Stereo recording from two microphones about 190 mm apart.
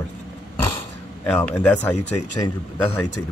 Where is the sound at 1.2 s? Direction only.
10° left (ahead or behind).